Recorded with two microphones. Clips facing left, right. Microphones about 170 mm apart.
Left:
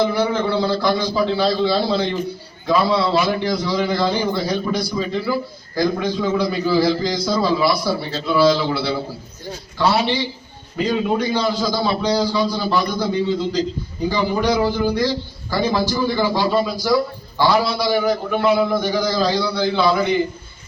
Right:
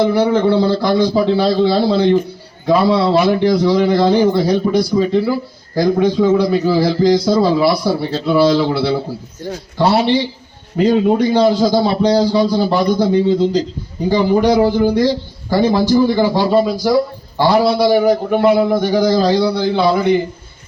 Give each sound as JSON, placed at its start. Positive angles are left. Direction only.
{"t": 0.3, "sound": "a man's voice", "side_deg": -55}